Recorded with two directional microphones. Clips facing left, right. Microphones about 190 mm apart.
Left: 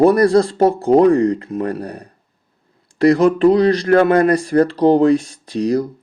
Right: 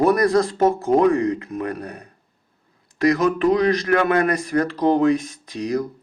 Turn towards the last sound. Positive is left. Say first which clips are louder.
# left 6 dB
turn(degrees=35)  # may be behind; listen again after turning